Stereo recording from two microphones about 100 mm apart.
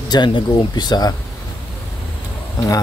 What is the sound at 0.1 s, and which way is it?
Speech, 50° left (ahead or behind).